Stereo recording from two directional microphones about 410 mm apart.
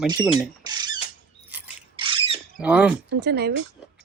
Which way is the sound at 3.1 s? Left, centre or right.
Right.